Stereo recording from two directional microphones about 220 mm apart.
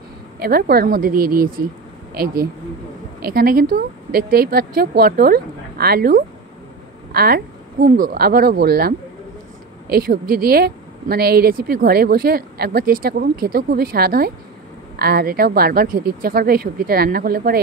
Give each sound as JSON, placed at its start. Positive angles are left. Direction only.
{"t": 0.4, "sound": "a woman's voice", "side_deg": -45}